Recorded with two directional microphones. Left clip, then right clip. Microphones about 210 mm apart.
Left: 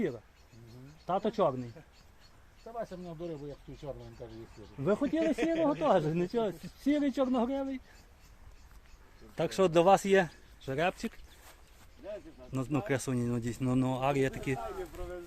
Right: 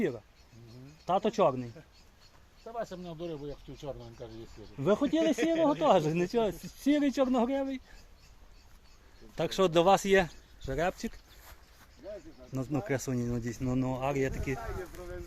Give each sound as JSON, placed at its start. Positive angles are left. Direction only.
{"t": 1.0, "sound": "speech", "side_deg": -15}
{"t": 2.6, "sound": "speech", "side_deg": -20}
{"t": 4.8, "sound": "speech", "side_deg": -10}
{"t": 5.4, "sound": "speech", "side_deg": -35}
{"t": 5.8, "sound": "speech", "side_deg": -5}
{"t": 9.3, "sound": "speech", "side_deg": 0}
{"t": 12.5, "sound": "speech", "side_deg": 5}